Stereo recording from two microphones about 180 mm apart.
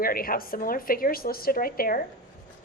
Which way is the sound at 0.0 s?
55° left (ahead or behind).